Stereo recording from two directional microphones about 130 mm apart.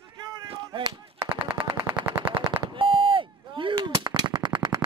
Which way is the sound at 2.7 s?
40° right (ahead or behind).